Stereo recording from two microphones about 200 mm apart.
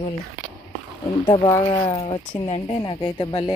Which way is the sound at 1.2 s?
20° left (ahead or behind).